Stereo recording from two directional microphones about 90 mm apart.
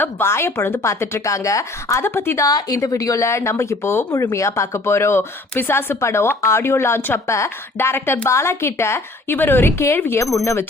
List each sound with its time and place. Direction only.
0.0 s speech: 25° left (ahead or behind)
2.4 s speech: 45° left (ahead or behind)